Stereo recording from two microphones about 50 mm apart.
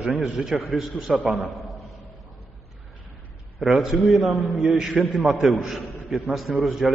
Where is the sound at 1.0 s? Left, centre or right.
Centre.